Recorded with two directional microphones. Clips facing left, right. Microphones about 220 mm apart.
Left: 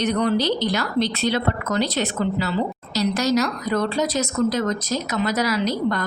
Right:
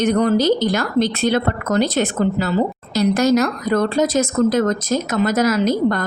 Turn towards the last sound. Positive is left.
turn(degrees=-45)  # may be behind; listen again after turning